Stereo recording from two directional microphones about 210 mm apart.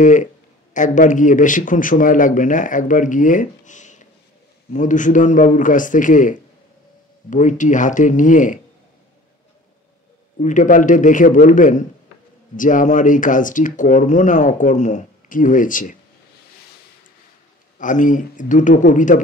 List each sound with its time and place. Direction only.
0.0 s speech: 35° left (ahead or behind)
10.4 s speech: 35° left (ahead or behind)
17.7 s speech: 40° left (ahead or behind)